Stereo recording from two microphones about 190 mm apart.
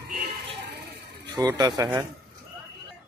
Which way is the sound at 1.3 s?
20° right (ahead or behind).